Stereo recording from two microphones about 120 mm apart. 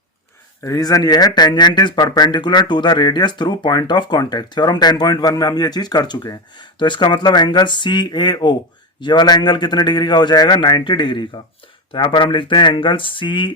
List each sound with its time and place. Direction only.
0.6 s speech: 30° left (ahead or behind)